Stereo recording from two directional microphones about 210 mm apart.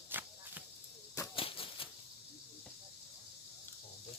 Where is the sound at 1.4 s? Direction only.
25° left (ahead or behind).